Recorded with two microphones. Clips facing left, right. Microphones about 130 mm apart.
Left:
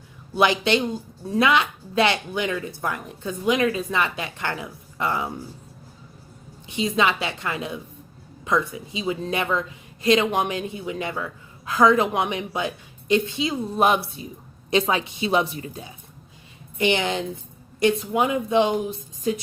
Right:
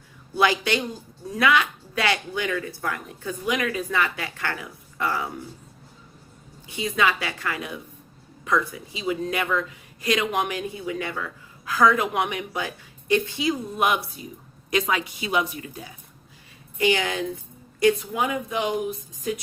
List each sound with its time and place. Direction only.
0.3 s speech: 20° left (ahead or behind)
6.7 s speech: 25° left (ahead or behind)